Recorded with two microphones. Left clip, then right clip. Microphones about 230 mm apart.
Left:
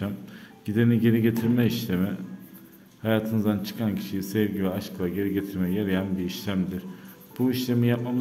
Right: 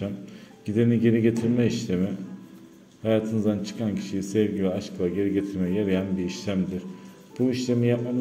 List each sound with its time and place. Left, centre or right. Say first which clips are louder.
0.7 s speech: right 1 dB; centre